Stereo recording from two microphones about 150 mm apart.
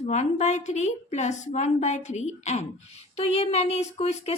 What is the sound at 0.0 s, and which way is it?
Speech, 50° left (ahead or behind).